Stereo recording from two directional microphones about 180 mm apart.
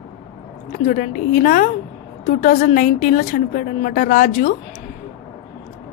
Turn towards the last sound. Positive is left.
turn(degrees=50)  # may be behind; listen again after turning